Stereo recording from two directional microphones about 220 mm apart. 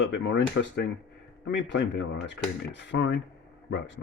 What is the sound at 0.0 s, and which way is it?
Speech, 55° left (ahead or behind).